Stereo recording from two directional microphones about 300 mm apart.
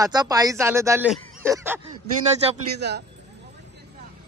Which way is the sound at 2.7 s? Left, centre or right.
Right.